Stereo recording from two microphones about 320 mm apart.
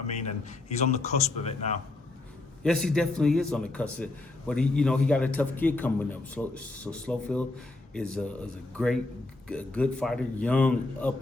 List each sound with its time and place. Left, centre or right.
0.2 s speech: left
2.6 s a man's voice: centre